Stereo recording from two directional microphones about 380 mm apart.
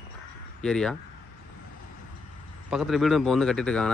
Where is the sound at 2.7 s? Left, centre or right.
Centre.